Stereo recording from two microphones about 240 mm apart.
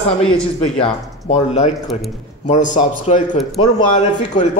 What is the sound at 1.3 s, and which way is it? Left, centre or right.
A man's voice, left.